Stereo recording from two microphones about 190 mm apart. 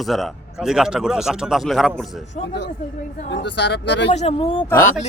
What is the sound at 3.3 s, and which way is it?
Speech, 65° left (ahead or behind).